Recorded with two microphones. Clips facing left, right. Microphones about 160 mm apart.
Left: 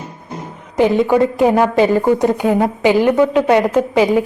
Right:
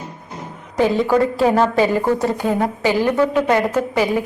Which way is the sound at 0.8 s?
20° left (ahead or behind).